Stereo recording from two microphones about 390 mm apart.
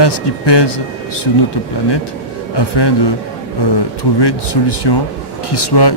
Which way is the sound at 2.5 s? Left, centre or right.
Left.